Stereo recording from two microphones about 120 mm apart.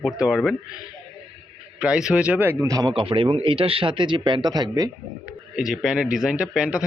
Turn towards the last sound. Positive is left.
turn(degrees=-5)  # may be behind; listen again after turning